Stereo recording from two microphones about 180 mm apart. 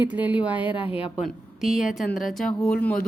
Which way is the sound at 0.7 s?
30° left (ahead or behind).